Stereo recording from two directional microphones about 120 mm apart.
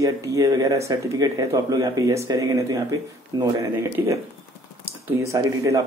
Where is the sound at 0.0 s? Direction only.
25° right (ahead or behind).